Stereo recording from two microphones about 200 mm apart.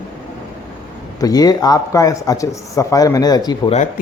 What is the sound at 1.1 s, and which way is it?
Speech, 20° left (ahead or behind).